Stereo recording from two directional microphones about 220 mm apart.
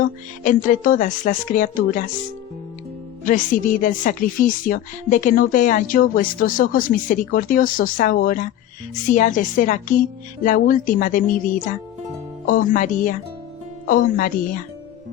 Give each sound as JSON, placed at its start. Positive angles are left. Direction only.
{"t": 0.0, "sound": "a woman's voice", "side_deg": 35}
{"t": 3.2, "sound": "a woman's voice", "side_deg": 35}
{"t": 12.5, "sound": "a woman's voice", "side_deg": 40}